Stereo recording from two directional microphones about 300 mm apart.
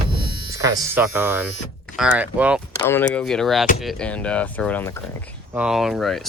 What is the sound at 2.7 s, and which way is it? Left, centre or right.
Speech, centre.